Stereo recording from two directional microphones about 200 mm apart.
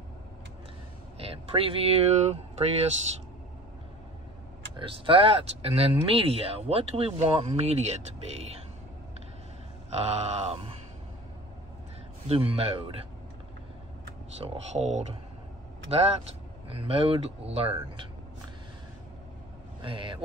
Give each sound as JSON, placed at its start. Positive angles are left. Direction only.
{"t": 1.2, "sound": "speech", "side_deg": -30}
{"t": 4.7, "sound": "speech", "side_deg": -25}
{"t": 9.9, "sound": "a sound", "side_deg": -35}
{"t": 12.3, "sound": "speech", "side_deg": -30}
{"t": 14.4, "sound": "a sound", "side_deg": -30}
{"t": 16.6, "sound": "speech", "side_deg": -30}
{"t": 19.8, "sound": "speech", "side_deg": -25}